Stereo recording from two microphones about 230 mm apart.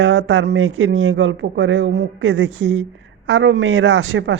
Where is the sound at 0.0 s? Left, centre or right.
Right.